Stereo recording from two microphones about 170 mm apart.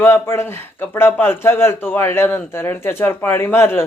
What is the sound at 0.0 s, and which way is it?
Speech, 15° left (ahead or behind).